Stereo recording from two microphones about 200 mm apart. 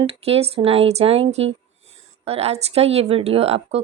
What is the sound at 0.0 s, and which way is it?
Speech, 30° right (ahead or behind).